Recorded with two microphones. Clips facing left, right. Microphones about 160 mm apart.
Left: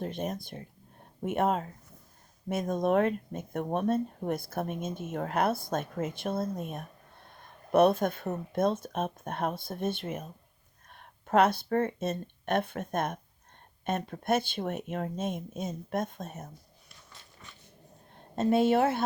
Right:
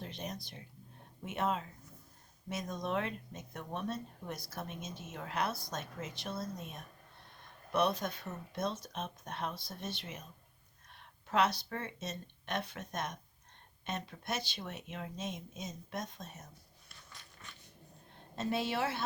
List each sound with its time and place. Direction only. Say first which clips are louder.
0.0 s speech: left 9 dB; 50° left (ahead or behind)
18.3 s speech: left 11 dB; 50° left (ahead or behind)